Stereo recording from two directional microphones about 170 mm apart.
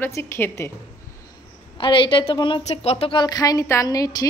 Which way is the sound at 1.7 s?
30° left (ahead or behind).